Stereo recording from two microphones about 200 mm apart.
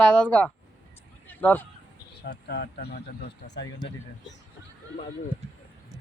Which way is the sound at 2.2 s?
55° left (ahead or behind).